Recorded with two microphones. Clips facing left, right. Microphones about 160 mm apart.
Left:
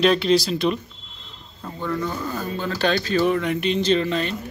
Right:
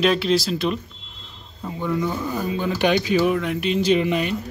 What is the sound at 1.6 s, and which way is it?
Speech, 10° right (ahead or behind).